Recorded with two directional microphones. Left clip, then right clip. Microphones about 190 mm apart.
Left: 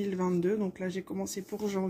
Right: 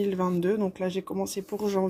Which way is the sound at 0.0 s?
25° right (ahead or behind).